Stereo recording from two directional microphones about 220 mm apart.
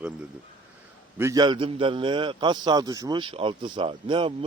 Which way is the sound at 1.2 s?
15° right (ahead or behind).